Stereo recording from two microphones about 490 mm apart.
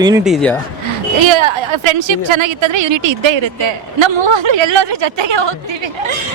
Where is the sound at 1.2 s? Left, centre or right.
Right.